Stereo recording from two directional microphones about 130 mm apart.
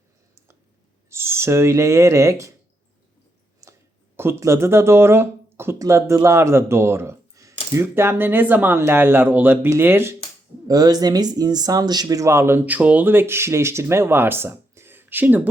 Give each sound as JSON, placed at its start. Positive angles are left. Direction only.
{"t": 1.1, "sound": "speech", "side_deg": -20}
{"t": 3.6, "sound": "a sound", "side_deg": -25}
{"t": 4.2, "sound": "speech", "side_deg": -20}
{"t": 10.7, "sound": "speech", "side_deg": -30}